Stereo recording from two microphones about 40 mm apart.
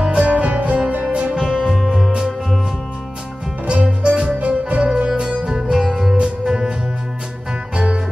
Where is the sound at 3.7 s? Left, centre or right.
Right.